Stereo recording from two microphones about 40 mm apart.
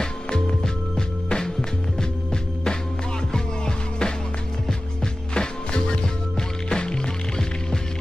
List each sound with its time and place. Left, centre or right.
0.0 s music: centre
3.3 s music: centre